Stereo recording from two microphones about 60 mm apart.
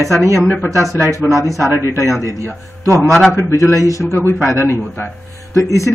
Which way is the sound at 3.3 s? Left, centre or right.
Left.